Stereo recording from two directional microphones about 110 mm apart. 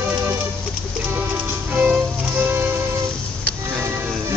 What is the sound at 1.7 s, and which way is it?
Music, 15° right (ahead or behind).